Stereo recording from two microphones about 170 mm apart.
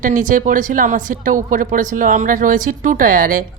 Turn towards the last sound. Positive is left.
turn(degrees=-55)  # may be behind; listen again after turning